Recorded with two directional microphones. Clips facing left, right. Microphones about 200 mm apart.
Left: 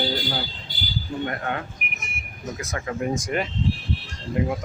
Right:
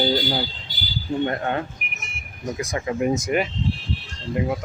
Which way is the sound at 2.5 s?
15° right (ahead or behind).